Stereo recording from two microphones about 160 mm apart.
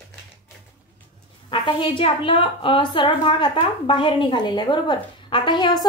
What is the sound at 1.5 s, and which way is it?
A woman's voice, 30° left (ahead or behind).